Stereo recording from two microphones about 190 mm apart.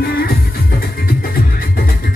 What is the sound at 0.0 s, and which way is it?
Music, 50° left (ahead or behind).